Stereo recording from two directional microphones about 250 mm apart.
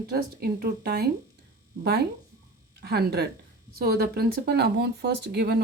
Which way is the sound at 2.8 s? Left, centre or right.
Right.